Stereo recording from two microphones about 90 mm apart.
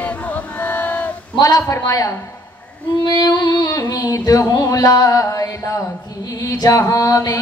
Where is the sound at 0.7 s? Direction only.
20° left (ahead or behind).